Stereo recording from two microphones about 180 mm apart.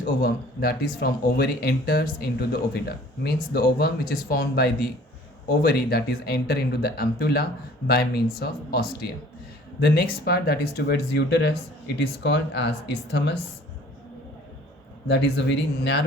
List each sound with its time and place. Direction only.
0.0 s speech: 60° left (ahead or behind)
15.0 s speech: 80° left